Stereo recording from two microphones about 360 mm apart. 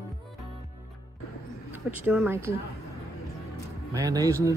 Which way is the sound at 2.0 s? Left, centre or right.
Centre.